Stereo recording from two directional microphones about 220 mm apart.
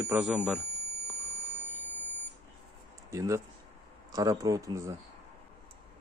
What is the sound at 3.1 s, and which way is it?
Speech, 15° right (ahead or behind).